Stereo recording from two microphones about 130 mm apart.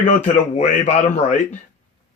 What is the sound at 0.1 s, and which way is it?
Speech, 65° left (ahead or behind).